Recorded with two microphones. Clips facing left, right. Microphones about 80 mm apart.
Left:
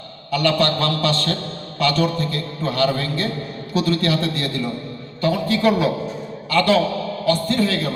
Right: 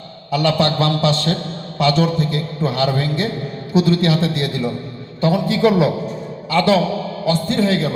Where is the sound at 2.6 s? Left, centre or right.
Right.